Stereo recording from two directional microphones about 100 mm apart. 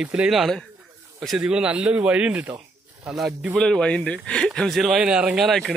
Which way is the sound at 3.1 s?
Centre (ahead or behind).